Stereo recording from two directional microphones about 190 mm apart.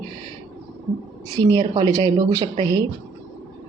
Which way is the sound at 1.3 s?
20° right (ahead or behind).